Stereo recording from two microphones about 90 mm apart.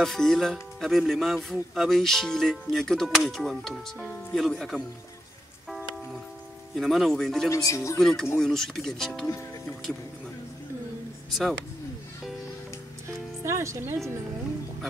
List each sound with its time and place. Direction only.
0.0 s speech: 5° left (ahead or behind)
6.7 s speech: centre (ahead or behind)
7.4 s speech: 35° left (ahead or behind)
8.0 s speech: 5° left (ahead or behind)
13.4 s speech: 30° right (ahead or behind)